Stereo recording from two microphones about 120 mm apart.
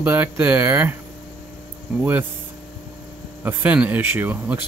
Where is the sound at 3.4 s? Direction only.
15° right (ahead or behind).